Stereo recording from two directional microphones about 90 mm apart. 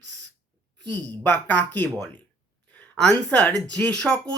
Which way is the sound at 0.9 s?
20° left (ahead or behind).